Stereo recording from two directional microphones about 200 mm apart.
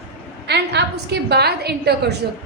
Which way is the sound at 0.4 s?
55° right (ahead or behind).